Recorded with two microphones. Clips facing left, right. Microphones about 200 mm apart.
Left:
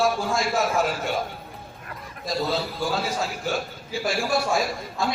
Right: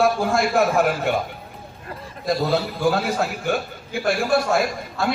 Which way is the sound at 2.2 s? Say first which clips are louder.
Right 5 dB; 60° right (ahead or behind).